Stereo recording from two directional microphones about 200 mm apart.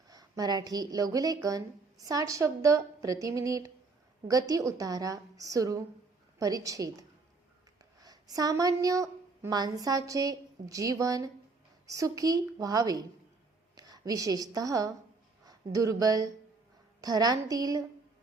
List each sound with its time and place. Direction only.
0.1 s speech: 20° right (ahead or behind)
8.0 s a woman's voice: 20° right (ahead or behind)